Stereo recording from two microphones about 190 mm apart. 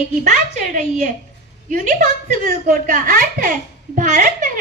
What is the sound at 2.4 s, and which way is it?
A woman's voice, 45° right (ahead or behind).